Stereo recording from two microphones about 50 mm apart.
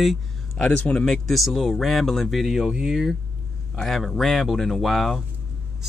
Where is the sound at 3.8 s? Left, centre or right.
Centre.